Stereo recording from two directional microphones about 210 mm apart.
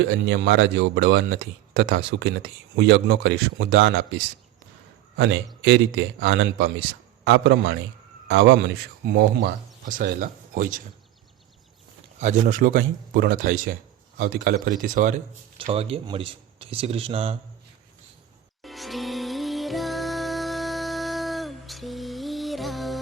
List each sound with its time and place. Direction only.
0.0 s a man's voice: 55° right (ahead or behind); by 10.8 s 40° right (ahead or behind)
12.2 s a man's voice: 35° right (ahead or behind)
15.5 s speech: 25° right (ahead or behind)
18.6 s music: centre (ahead or behind)